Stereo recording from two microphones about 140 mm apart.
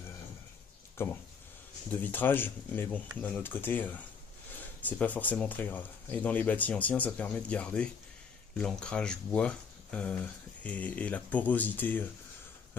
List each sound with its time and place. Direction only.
1.0 s speech: 15° left (ahead or behind)